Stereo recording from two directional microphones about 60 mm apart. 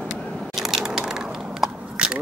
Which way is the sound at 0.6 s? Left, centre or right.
Centre.